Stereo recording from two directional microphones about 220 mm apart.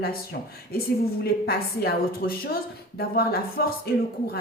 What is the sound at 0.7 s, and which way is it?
A woman's voice, 45° left (ahead or behind).